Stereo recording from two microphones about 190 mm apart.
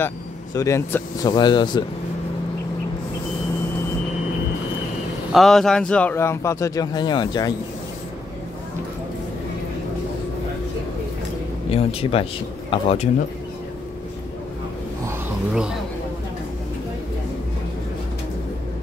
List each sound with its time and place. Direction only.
0.6 s speech: 15° left (ahead or behind)
5.3 s a man's voice: centre (ahead or behind); by 7.5 s 20° left (ahead or behind)
11.7 s speech: 30° left (ahead or behind)